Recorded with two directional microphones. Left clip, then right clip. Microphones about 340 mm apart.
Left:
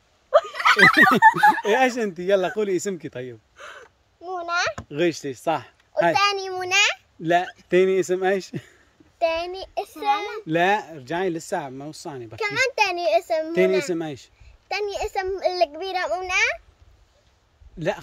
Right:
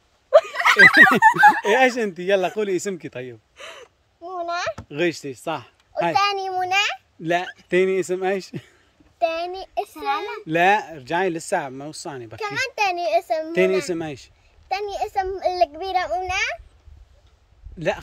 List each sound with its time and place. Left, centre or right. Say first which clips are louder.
0.5 s a sound: right 1 dB; centre
1.8 s a child's voice: right 3 dB; centre
3.5 s speech: right 2 dB; right
4.2 s a child's voice: left 2 dB; centre
17.7 s a child's voice: right 2 dB; centre